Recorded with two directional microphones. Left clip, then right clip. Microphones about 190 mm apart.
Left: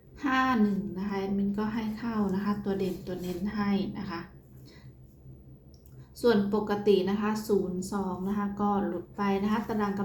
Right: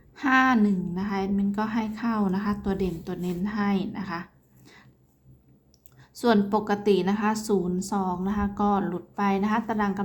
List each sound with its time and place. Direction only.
0.2 s a woman's voice: 35° right (ahead or behind)
6.1 s a woman's voice: 40° right (ahead or behind)